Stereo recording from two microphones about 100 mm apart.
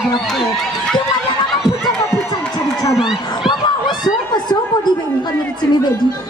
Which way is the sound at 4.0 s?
45° left (ahead or behind).